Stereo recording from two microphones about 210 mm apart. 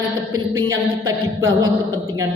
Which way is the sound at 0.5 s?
15° right (ahead or behind).